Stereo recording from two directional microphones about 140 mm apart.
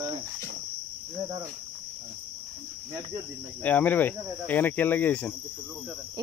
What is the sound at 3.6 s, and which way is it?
Speech, 10° left (ahead or behind).